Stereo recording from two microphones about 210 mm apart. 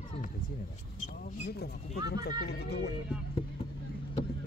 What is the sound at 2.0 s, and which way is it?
Speech, 50° left (ahead or behind).